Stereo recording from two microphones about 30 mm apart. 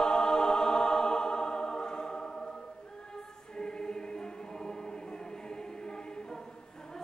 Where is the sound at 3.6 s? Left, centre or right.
Left.